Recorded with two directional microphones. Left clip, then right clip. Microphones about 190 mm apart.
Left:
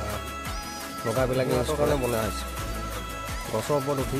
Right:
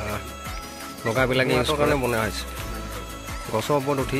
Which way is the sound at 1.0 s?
15° right (ahead or behind).